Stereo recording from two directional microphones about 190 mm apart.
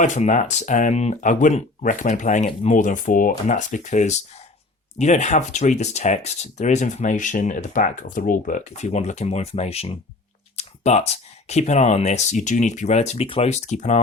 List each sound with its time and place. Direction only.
0.0 s speech: 40° left (ahead or behind)